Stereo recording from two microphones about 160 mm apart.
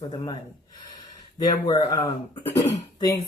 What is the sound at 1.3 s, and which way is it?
Speech, 25° left (ahead or behind).